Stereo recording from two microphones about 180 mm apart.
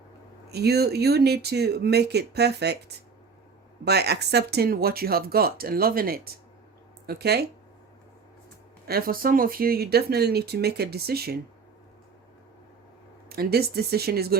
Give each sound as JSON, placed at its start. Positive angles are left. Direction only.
{"t": 0.5, "sound": "speech", "side_deg": -65}
{"t": 3.8, "sound": "speech", "side_deg": -65}
{"t": 8.9, "sound": "speech", "side_deg": -55}
{"t": 13.3, "sound": "speech", "side_deg": -60}